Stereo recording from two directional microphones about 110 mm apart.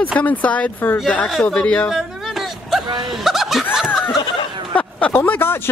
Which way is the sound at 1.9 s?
Centre (ahead or behind).